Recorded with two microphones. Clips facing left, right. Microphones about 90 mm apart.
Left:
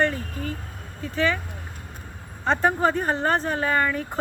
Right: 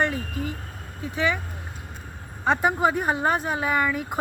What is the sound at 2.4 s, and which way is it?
Speech, 15° right (ahead or behind).